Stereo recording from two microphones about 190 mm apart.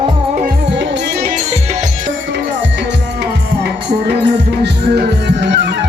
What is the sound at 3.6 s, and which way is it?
Music, 60° right (ahead or behind).